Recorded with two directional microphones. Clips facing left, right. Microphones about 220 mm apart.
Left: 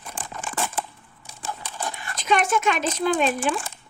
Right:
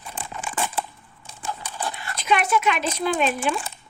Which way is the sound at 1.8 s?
45° left (ahead or behind).